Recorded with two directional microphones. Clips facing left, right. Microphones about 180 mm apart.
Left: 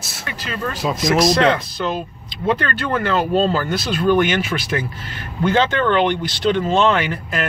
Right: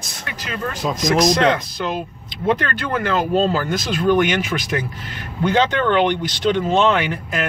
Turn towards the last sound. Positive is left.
turn(degrees=-15)  # may be behind; listen again after turning